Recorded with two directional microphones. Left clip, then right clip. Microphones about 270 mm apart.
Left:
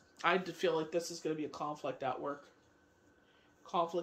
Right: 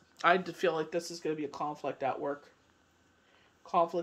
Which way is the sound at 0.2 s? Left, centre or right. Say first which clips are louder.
Right 5 dB; centre.